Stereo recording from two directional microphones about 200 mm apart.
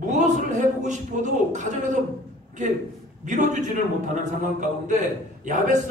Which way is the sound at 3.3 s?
40° right (ahead or behind).